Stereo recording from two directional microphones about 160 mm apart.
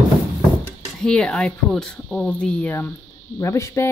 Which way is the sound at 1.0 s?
5° left (ahead or behind).